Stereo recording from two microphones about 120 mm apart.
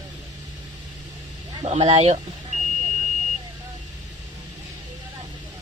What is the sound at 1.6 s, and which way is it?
Speech, 55° right (ahead or behind).